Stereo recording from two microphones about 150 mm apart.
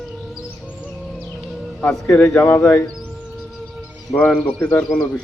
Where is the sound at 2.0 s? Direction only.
5° left (ahead or behind).